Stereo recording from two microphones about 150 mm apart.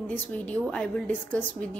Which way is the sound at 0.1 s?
10° left (ahead or behind).